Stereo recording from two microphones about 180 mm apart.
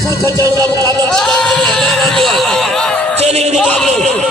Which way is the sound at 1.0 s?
Centre (ahead or behind).